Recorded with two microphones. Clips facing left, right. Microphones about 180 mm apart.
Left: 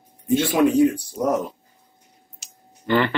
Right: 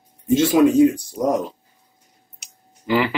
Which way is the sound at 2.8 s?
5° right (ahead or behind).